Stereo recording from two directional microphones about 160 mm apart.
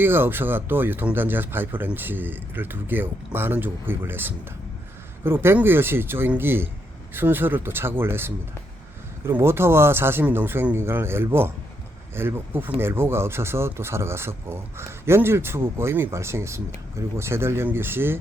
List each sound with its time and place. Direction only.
0.0 s speech: 15° right (ahead or behind)